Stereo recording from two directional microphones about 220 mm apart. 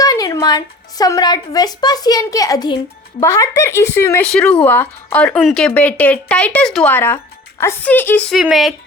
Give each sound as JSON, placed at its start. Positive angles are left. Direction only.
{"t": 0.0, "sound": "a woman's voice", "side_deg": 15}